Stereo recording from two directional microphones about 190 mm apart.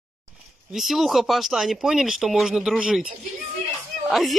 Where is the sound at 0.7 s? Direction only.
Centre (ahead or behind).